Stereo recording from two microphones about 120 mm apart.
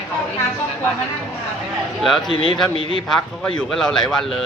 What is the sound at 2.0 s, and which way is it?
Speech, centre (ahead or behind).